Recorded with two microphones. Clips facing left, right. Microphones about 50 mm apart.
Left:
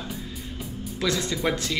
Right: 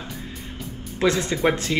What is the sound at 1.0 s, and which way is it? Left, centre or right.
Speech, right.